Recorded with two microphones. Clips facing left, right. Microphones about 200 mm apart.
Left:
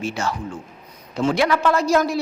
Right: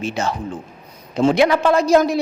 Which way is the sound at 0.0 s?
20° right (ahead or behind).